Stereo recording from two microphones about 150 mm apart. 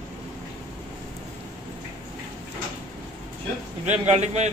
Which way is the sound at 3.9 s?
50° right (ahead or behind).